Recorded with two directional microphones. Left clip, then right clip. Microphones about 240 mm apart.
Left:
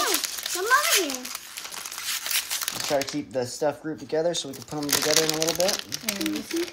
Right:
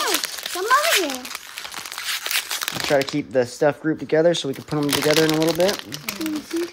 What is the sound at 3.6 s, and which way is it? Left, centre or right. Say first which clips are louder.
Speech: right 7 dB; right.